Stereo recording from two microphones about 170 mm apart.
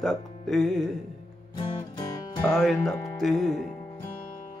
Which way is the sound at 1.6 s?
30° left (ahead or behind).